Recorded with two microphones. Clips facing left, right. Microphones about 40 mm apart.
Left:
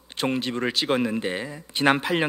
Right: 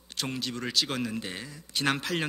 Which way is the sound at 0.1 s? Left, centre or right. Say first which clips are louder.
Left 8 dB; left.